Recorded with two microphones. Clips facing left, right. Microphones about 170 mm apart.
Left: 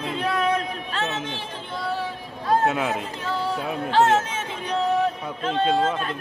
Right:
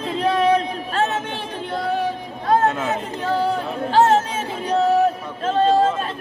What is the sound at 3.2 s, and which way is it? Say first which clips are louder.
Speech: right 8 dB; 60° right (ahead or behind).